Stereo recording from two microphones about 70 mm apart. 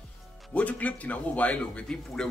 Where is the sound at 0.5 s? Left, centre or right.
Centre.